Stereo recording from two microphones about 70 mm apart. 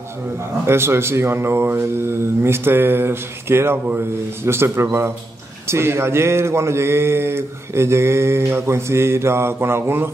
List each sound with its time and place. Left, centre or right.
0.7 s speech: right